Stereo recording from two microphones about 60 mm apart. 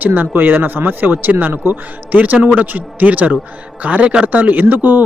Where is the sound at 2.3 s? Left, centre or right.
Centre.